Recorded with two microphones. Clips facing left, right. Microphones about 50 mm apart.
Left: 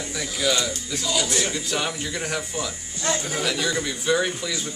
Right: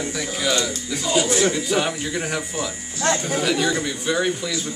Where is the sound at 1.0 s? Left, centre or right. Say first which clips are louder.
Right 6 dB; right.